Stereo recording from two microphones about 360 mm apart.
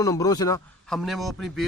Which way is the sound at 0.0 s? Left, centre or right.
Centre.